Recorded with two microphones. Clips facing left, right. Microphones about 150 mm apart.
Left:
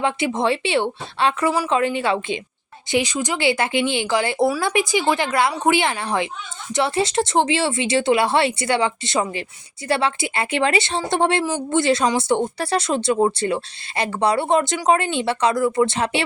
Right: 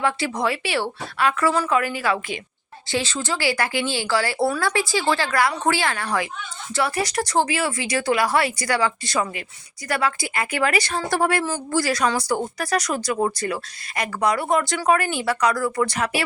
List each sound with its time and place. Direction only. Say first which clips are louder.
0.0 s speech: left 2 dB; 20° left (ahead or behind)